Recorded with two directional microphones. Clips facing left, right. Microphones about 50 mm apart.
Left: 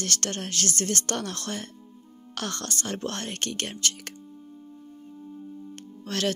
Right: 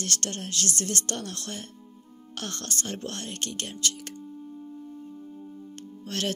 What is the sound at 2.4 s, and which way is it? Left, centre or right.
Music, left.